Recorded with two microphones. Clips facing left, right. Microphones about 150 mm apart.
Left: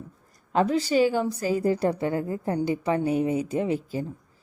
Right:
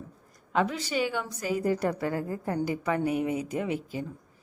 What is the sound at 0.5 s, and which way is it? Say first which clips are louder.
A woman's voice: left 6 dB; 35° left (ahead or behind).